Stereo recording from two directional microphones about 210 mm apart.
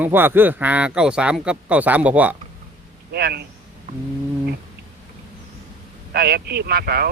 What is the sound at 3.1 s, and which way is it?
Speech, 50° right (ahead or behind).